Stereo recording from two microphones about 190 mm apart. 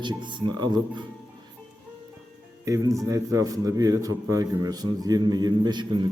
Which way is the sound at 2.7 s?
15° right (ahead or behind).